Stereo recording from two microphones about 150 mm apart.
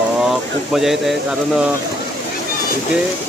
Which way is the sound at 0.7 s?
Centre (ahead or behind).